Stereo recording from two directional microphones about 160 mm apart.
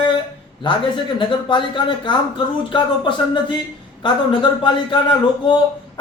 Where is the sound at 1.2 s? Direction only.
30° left (ahead or behind).